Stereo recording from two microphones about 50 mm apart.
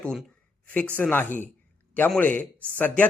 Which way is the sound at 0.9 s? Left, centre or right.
Left.